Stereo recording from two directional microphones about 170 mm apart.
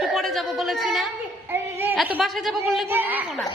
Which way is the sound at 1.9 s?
5° right (ahead or behind).